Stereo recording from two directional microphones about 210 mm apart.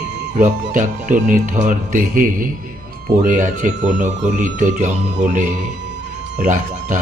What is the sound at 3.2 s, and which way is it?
Speech, 35° right (ahead or behind).